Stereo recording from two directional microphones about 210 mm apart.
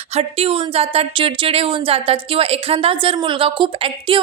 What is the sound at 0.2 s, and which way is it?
Speech, 25° right (ahead or behind).